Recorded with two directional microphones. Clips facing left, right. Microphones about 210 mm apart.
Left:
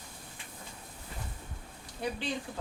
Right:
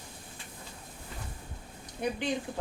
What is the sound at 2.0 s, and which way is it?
Speech, 20° right (ahead or behind).